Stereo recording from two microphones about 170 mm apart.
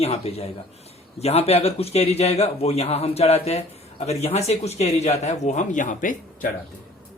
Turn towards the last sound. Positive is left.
turn(degrees=50)  # may be behind; listen again after turning